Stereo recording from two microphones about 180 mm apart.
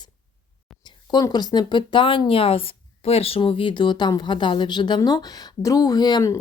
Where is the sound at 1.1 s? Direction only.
25° left (ahead or behind).